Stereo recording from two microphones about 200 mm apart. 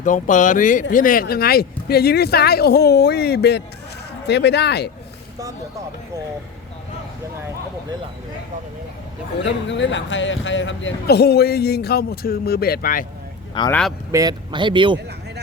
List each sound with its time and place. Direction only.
0.0 s speech: 40° left (ahead or behind); by 4.9 s 55° left (ahead or behind)
9.6 s speech: 65° left (ahead or behind); by 13.1 s 45° left (ahead or behind)
13.7 s speech: 5° left (ahead or behind)
14.1 s speech: 20° right (ahead or behind)